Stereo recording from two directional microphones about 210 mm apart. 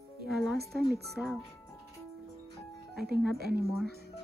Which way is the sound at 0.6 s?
50° right (ahead or behind).